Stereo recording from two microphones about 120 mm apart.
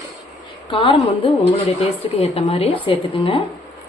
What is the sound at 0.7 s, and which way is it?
A woman's voice, 45° left (ahead or behind).